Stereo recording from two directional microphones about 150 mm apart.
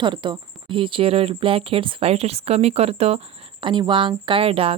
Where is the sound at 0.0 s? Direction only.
30° right (ahead or behind).